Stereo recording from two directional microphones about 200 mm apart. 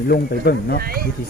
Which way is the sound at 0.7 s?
50° right (ahead or behind).